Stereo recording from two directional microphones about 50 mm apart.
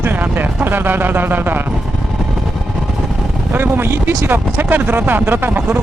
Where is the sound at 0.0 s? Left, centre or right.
Right.